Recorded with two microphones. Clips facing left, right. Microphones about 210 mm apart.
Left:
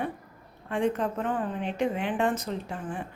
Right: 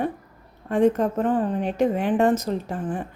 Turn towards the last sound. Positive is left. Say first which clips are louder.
# right 6 dB
turn(degrees=-40)  # may be behind; listen again after turning